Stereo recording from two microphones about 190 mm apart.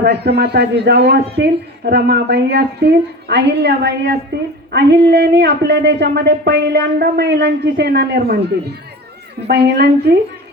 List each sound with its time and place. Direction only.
0.0 s speech: 60° right (ahead or behind)
9.5 s speech: 60° right (ahead or behind)